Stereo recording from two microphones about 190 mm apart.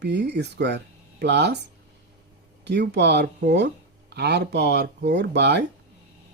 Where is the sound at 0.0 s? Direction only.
65° right (ahead or behind).